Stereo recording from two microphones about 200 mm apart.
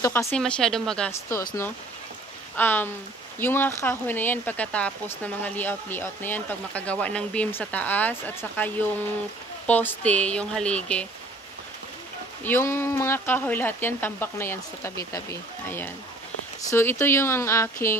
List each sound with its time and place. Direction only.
0.0 s speech: 10° left (ahead or behind)
2.5 s speech: 10° left (ahead or behind)
12.4 s speech: 10° left (ahead or behind)